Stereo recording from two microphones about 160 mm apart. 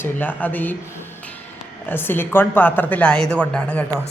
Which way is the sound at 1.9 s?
15° left (ahead or behind).